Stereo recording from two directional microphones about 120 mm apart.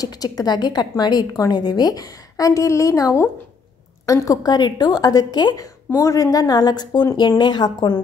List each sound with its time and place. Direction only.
0.0 s a woman's voice: 30° left (ahead or behind)